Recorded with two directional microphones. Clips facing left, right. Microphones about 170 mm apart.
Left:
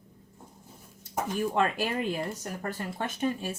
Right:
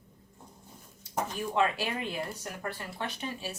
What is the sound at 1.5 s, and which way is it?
Speech, 50° left (ahead or behind).